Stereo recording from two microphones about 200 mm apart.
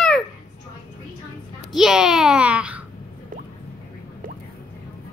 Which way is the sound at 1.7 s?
Centre (ahead or behind).